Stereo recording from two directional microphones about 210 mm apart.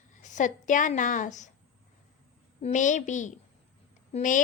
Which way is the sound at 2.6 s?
35° left (ahead or behind).